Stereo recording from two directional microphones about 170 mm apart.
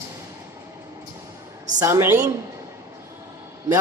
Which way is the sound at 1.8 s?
15° right (ahead or behind).